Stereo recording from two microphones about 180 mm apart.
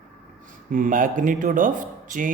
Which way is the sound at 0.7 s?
50° right (ahead or behind).